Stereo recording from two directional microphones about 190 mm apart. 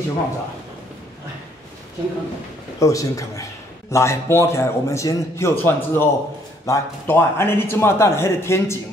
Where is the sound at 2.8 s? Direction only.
15° left (ahead or behind).